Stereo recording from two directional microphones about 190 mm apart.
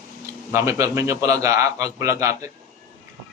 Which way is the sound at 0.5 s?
15° right (ahead or behind).